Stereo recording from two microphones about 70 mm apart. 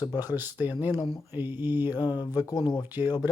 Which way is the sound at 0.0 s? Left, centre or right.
Left.